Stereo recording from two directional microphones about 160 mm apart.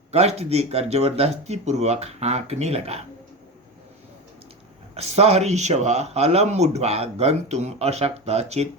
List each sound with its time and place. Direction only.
0.1 s speech: 40° right (ahead or behind)
4.9 s speech: 40° right (ahead or behind)